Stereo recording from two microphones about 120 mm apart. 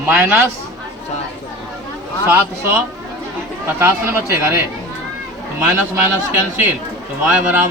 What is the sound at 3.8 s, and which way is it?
Speech, 20° right (ahead or behind).